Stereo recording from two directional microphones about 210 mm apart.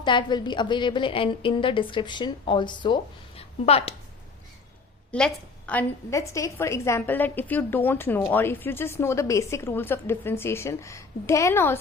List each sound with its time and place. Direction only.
0.0 s a woman's voice: 20° left (ahead or behind)
5.1 s a woman's voice: 5° left (ahead or behind)